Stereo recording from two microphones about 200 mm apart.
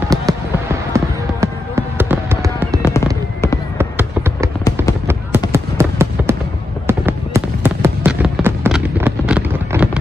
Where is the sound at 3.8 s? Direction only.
10° right (ahead or behind).